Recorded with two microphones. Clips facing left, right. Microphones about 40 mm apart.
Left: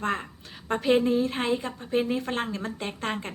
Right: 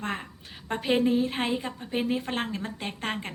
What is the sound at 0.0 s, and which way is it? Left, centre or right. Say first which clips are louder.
A woman's voice: left 4 dB; centre.